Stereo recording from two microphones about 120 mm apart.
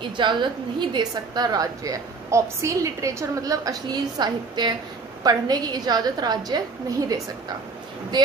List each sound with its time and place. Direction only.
0.2 s a woman's voice: 40° right (ahead or behind)